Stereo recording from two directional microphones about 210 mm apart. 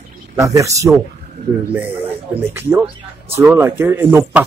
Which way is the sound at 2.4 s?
10° right (ahead or behind).